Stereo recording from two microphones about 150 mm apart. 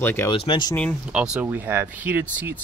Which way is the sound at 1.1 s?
5° right (ahead or behind).